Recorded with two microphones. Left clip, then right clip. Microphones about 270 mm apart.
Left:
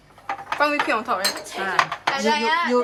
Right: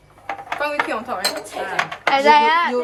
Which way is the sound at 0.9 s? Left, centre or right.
Centre.